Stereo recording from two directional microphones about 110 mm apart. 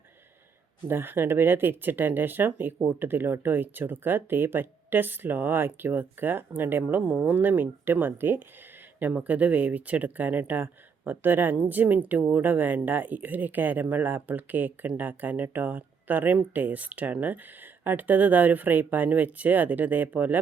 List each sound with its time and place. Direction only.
0.9 s speech: 20° right (ahead or behind)